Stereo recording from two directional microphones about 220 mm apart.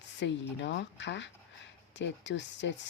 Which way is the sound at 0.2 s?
55° left (ahead or behind).